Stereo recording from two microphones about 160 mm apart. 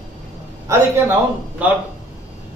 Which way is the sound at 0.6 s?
15° right (ahead or behind).